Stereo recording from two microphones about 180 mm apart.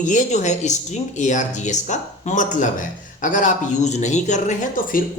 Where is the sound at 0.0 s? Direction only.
45° left (ahead or behind).